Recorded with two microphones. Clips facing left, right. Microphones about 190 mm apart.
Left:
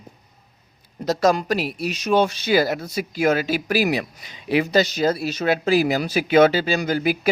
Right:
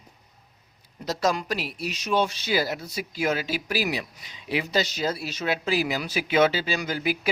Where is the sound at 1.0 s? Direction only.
45° left (ahead or behind).